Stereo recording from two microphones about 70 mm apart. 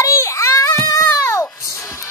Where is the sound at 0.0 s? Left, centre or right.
Left.